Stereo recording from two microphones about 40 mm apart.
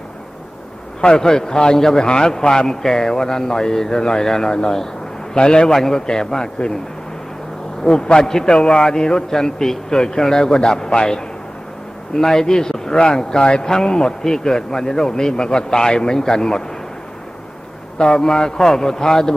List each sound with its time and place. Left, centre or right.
1.0 s a man's voice: centre
7.9 s a man's voice: left
17.9 s a man's voice: centre